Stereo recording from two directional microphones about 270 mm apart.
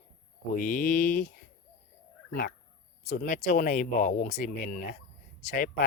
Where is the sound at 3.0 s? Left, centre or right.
Left.